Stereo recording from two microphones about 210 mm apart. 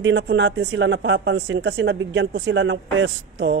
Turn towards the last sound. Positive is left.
turn(degrees=-55)  # may be behind; listen again after turning